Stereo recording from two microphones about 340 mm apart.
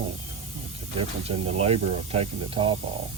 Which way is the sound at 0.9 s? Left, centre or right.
Centre.